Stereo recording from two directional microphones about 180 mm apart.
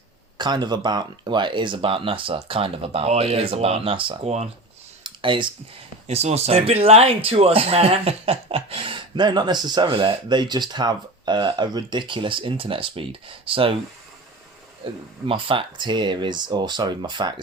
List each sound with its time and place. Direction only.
0.3 s speech: 25° right (ahead or behind)
5.0 s computer keyboard: 25° right (ahead or behind)
6.1 s speech: 35° right (ahead or behind)
14.8 s speech: 30° right (ahead or behind)